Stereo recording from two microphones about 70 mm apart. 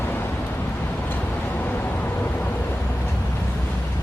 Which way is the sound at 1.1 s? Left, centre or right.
Left.